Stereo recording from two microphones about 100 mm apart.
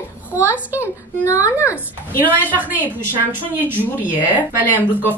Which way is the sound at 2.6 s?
20° right (ahead or behind).